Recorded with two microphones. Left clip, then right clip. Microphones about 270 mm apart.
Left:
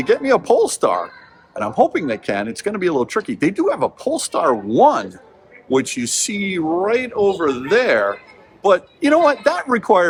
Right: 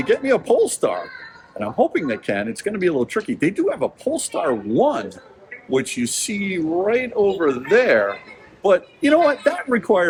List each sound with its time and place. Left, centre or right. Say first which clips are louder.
0.0 s speech: left 3 dB; centre